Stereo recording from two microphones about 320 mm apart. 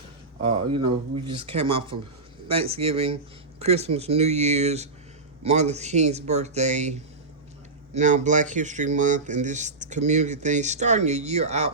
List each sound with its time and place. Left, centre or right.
0.4 s speech: centre
7.9 s speech: right